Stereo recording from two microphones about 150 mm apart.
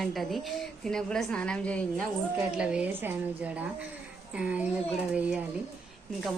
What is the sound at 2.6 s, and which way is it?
A woman's voice, 5° right (ahead or behind).